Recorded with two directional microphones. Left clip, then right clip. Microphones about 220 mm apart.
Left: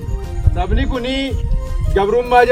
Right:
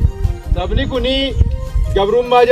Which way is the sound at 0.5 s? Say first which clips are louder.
Right 2 dB; 10° left (ahead or behind).